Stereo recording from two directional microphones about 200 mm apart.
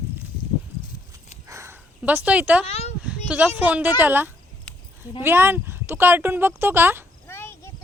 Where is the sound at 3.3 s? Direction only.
5° right (ahead or behind).